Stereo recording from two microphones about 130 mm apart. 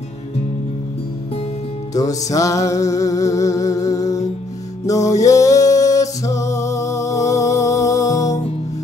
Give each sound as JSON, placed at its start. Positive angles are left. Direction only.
{"t": 2.0, "sound": "music", "side_deg": 25}